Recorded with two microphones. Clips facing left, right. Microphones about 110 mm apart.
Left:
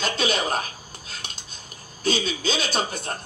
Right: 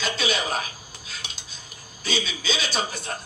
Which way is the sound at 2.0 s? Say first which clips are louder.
Left 4 dB; 45° left (ahead or behind).